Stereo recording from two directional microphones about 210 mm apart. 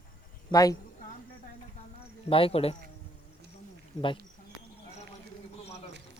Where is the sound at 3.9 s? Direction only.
Centre (ahead or behind).